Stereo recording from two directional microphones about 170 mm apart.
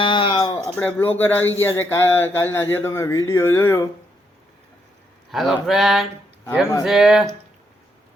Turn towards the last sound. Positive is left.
turn(degrees=0)  # may be behind; listen again after turning